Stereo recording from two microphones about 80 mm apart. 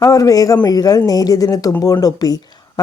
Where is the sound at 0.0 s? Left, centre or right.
Left.